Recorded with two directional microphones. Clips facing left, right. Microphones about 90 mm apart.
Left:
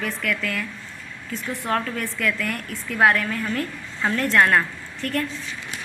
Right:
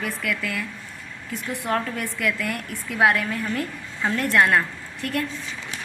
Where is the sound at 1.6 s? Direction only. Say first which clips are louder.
Even; 20° right (ahead or behind).